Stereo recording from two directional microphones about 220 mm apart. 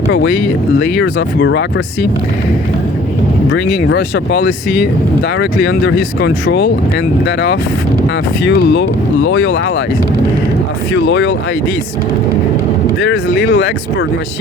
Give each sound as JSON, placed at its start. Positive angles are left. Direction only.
{"t": 0.1, "sound": "speech", "side_deg": 55}
{"t": 3.7, "sound": "speech", "side_deg": 45}
{"t": 9.2, "sound": "speech", "side_deg": 70}
{"t": 11.0, "sound": "speech", "side_deg": 55}
{"t": 13.0, "sound": "speech", "side_deg": 50}